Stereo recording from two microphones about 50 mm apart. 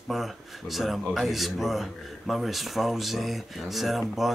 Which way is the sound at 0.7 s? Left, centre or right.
Centre.